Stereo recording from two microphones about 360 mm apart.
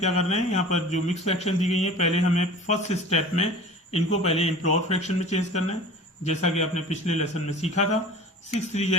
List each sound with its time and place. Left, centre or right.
0.0 s speech: centre